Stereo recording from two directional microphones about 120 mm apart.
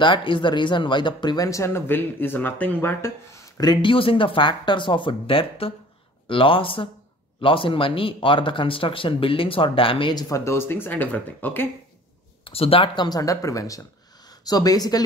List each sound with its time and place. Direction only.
0.0 s speech: 40° left (ahead or behind)
10.2 s speech: 25° left (ahead or behind)
12.4 s speech: 50° left (ahead or behind); by 15.0 s 35° left (ahead or behind)